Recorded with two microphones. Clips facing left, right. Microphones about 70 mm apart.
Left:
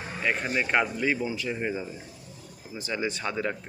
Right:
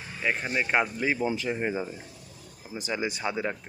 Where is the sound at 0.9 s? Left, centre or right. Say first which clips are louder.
Even; right.